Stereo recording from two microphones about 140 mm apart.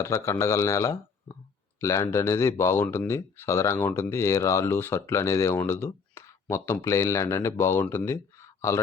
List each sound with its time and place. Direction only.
0.0 s speech: 20° left (ahead or behind)